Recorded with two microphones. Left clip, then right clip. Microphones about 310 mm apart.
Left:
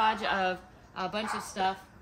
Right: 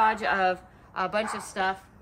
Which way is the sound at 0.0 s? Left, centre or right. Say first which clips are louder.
Right 4 dB; centre.